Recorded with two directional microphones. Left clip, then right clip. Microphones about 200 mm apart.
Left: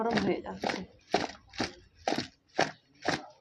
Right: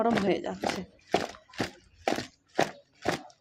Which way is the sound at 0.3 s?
50° right (ahead or behind).